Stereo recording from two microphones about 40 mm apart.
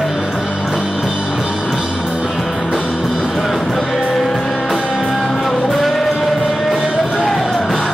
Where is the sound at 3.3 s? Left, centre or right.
Centre.